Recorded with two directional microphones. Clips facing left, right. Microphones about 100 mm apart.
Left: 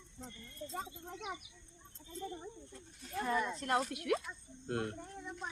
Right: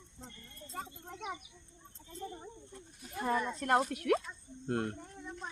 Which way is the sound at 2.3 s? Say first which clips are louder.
Left 1 dB; 15° right (ahead or behind).